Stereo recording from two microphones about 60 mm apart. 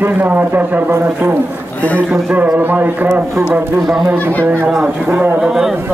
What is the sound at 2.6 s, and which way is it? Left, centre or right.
Speech, right.